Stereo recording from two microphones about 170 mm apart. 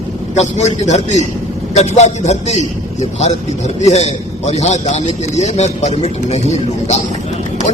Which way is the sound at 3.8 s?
40° left (ahead or behind).